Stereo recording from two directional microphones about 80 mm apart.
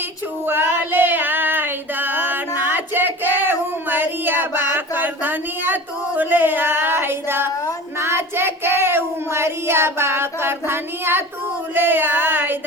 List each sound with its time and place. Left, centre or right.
0.4 s female singing: right
7.9 s child singing: right
11.7 s a sound: right